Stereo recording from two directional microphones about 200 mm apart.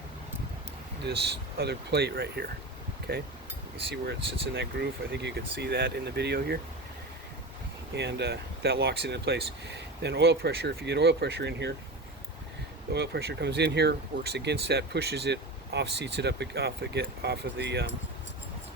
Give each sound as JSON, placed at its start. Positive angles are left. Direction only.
{"t": 1.0, "sound": "speech", "side_deg": -55}
{"t": 4.5, "sound": "speech", "side_deg": -60}
{"t": 7.9, "sound": "speech", "side_deg": -55}
{"t": 12.9, "sound": "speech", "side_deg": -55}